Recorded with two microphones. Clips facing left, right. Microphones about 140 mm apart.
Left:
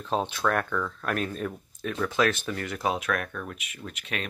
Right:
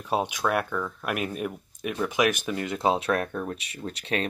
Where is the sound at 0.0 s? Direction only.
15° right (ahead or behind).